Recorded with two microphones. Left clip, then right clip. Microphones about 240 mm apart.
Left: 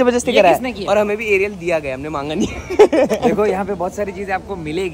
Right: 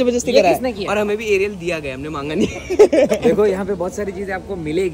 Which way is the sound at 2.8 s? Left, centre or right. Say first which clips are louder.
Even; left.